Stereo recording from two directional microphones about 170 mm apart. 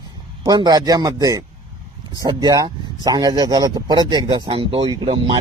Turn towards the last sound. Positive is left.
turn(degrees=-30)  # may be behind; listen again after turning